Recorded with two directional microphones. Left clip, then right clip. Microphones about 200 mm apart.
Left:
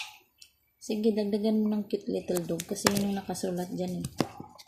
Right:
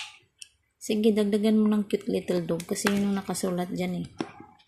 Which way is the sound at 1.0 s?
15° right (ahead or behind).